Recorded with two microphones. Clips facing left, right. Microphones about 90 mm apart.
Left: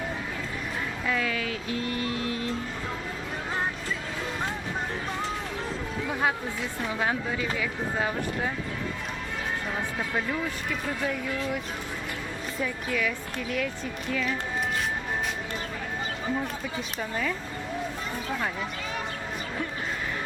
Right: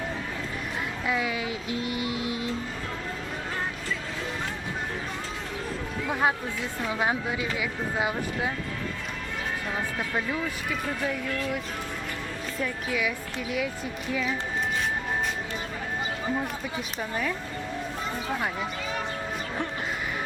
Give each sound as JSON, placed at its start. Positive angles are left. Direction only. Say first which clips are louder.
{"t": 1.0, "sound": "vehicle", "louder": "right 1 dB", "side_deg": -15}
{"t": 6.1, "sound": "speech", "louder": "right 2 dB", "side_deg": -25}
{"t": 9.7, "sound": "speech", "louder": "right 2 dB", "side_deg": 0}
{"t": 12.5, "sound": "speech", "louder": "even", "side_deg": -5}
{"t": 16.2, "sound": "speech", "louder": "even", "side_deg": -15}